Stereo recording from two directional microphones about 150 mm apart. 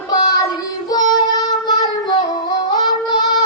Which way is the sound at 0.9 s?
25° left (ahead or behind).